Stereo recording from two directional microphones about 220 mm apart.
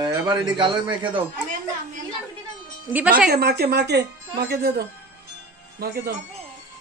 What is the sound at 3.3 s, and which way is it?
A woman's voice, 45° right (ahead or behind).